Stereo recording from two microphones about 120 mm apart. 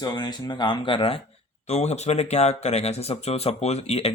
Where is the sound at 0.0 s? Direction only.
35° left (ahead or behind).